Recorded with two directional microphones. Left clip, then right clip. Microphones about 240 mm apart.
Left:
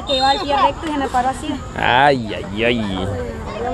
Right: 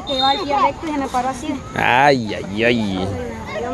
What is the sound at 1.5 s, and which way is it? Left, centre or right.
Speech, centre.